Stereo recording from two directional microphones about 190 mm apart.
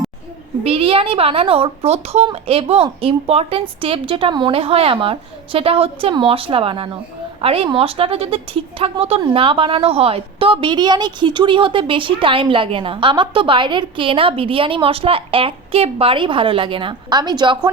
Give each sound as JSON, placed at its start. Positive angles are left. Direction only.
{"t": 0.6, "sound": "speech", "side_deg": -30}